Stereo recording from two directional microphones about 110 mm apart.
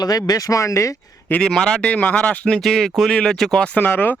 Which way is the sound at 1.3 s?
5° left (ahead or behind).